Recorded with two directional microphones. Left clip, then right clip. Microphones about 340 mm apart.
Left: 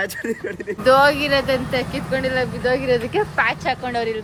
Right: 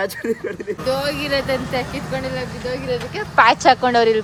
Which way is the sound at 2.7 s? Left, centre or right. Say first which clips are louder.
Left 5 dB; left.